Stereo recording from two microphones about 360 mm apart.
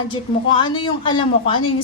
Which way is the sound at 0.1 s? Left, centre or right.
Centre.